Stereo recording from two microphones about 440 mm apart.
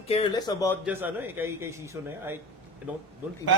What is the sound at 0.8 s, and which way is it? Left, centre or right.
Speech, centre.